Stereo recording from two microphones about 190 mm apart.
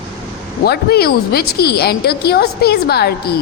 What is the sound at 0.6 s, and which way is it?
A woman's voice, 55° left (ahead or behind).